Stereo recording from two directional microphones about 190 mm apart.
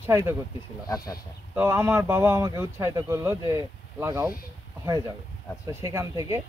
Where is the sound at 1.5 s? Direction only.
10° right (ahead or behind).